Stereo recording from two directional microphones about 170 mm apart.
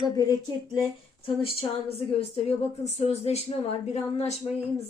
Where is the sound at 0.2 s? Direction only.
20° left (ahead or behind).